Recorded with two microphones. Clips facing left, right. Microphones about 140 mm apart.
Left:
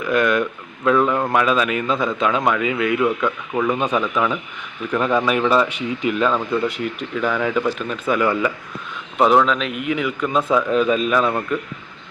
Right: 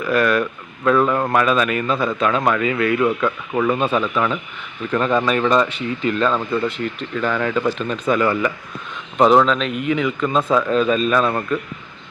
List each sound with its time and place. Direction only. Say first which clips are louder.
0.0 s speech: even; 15° left (ahead or behind)
3.2 s speech: right 1 dB; 5° right (ahead or behind)
3.7 s speech: right 1 dB; 15° left (ahead or behind)